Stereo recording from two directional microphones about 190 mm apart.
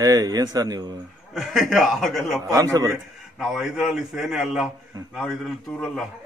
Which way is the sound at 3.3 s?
Centre (ahead or behind).